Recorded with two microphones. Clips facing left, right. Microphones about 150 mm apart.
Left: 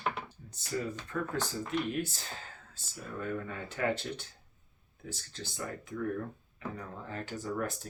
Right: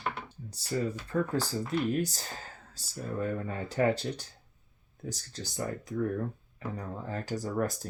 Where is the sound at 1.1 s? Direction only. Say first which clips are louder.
Right 5 dB; 35° right (ahead or behind).